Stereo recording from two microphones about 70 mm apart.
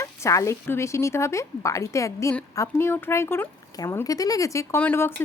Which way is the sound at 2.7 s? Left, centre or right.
Left.